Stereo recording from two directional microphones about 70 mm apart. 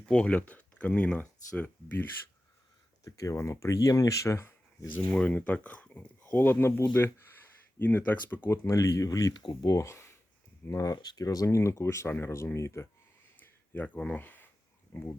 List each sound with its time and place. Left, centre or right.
0.0 s speech: centre
3.0 s speech: left
5.1 s speech: centre; by 7.3 s left
7.8 s speech: left
9.7 s speech: left
10.9 s speech: left
13.7 s speech: left